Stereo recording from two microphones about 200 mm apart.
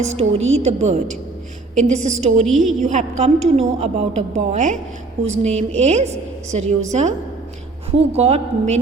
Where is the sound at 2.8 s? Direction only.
35° right (ahead or behind).